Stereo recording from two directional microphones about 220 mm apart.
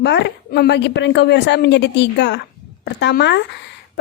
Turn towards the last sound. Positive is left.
turn(degrees=50)  # may be behind; listen again after turning